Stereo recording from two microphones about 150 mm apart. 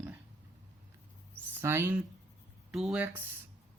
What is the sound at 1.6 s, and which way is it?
Speech, 15° right (ahead or behind).